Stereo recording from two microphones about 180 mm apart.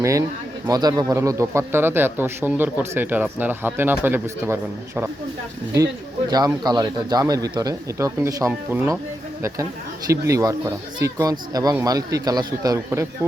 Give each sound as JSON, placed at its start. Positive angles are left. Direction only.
{"t": 0.0, "sound": "speech", "side_deg": -15}
{"t": 5.7, "sound": "speech", "side_deg": -20}
{"t": 10.1, "sound": "speech", "side_deg": -15}